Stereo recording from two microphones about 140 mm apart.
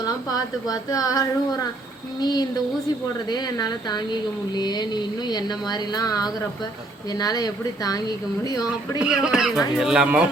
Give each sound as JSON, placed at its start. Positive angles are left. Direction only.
{"t": 0.0, "sound": "speech", "side_deg": 25}
{"t": 9.0, "sound": "speech", "side_deg": -5}